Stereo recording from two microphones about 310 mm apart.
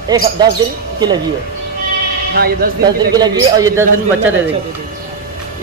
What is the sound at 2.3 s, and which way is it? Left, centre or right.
Speech, right.